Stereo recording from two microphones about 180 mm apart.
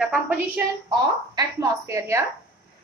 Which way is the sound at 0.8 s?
20° right (ahead or behind).